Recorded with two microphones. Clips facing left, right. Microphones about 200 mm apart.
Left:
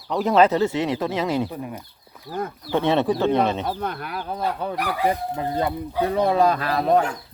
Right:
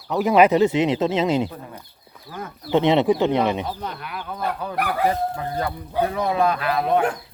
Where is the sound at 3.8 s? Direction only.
50° left (ahead or behind); by 4.7 s 35° left (ahead or behind).